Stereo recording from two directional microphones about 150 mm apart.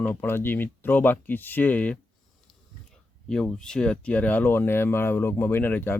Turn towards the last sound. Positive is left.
turn(degrees=15)  # may be behind; listen again after turning